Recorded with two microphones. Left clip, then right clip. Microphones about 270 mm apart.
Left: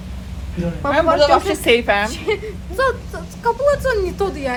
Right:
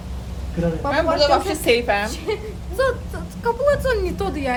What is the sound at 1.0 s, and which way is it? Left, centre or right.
A woman's voice, left.